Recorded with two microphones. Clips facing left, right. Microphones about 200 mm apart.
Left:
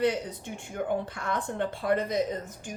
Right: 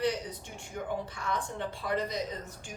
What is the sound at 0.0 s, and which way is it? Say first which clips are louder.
A woman's voice: left 4 dB; 55° left (ahead or behind).